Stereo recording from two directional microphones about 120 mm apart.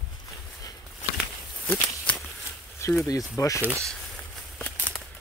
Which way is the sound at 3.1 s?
30° left (ahead or behind).